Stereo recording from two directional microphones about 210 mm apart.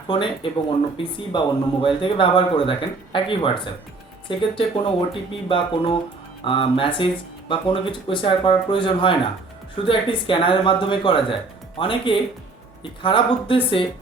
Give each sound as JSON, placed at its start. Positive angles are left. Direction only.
{"t": 0.7, "sound": "speech", "side_deg": 25}